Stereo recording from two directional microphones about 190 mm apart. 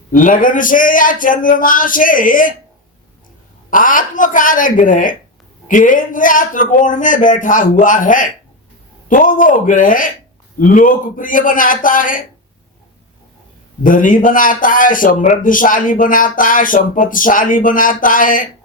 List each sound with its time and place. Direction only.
0.1 s a man's voice: 45° left (ahead or behind)
3.7 s a man's voice: 45° left (ahead or behind)
13.8 s a man's voice: 45° left (ahead or behind)